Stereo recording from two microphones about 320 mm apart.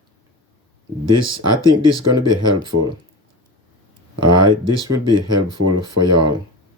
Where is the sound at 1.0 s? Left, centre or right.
Right.